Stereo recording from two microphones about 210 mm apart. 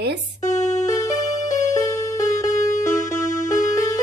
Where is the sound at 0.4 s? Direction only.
35° left (ahead or behind).